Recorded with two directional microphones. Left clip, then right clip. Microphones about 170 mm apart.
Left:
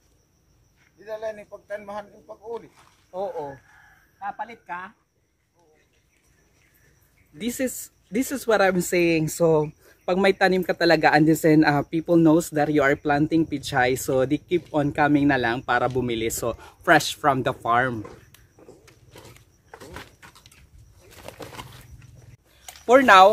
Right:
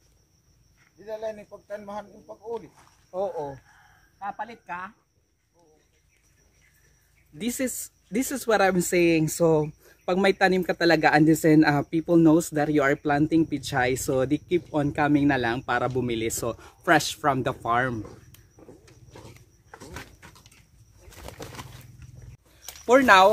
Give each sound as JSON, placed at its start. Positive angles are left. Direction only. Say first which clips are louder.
{"t": 1.0, "sound": "speech", "louder": "left 1 dB", "side_deg": 30}
{"t": 3.1, "sound": "speech", "louder": "even", "side_deg": 0}
{"t": 7.3, "sound": "speech", "louder": "left 2 dB", "side_deg": -15}
{"t": 19.1, "sound": "horse", "louder": "left 1 dB", "side_deg": 15}
{"t": 20.2, "sound": "a sound", "louder": "left 2 dB", "side_deg": 20}
{"t": 21.1, "sound": "bird", "louder": "left 2 dB", "side_deg": -15}
{"t": 22.8, "sound": "speech", "louder": "left 3 dB", "side_deg": 10}